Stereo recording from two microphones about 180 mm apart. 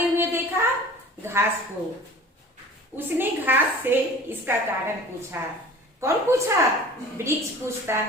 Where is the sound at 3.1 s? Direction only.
10° right (ahead or behind).